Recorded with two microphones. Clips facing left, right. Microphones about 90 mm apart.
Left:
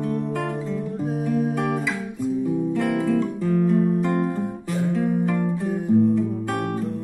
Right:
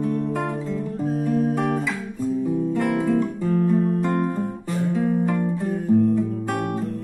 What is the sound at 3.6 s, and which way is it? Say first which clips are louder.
Music: left 1 dB; 5° left (ahead or behind).